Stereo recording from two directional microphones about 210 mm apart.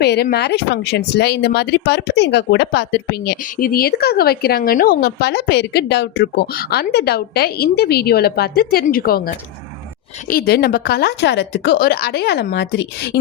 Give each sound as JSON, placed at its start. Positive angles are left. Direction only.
{"t": 0.0, "sound": "speech", "side_deg": 50}